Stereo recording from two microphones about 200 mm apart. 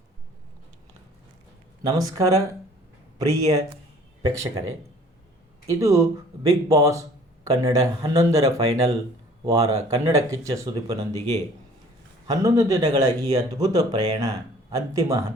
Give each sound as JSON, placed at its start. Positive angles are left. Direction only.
{"t": 1.8, "sound": "speech", "side_deg": -15}
{"t": 12.3, "sound": "speech", "side_deg": -15}